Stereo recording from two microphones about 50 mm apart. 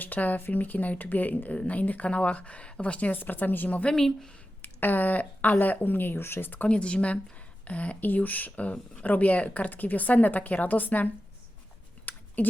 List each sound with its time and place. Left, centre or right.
0.0 s speech: left
3.8 s speech: centre
4.6 s speech: left
6.7 s speech: left
12.1 s a sound: left